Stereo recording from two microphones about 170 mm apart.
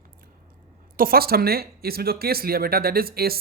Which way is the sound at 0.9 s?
60° right (ahead or behind).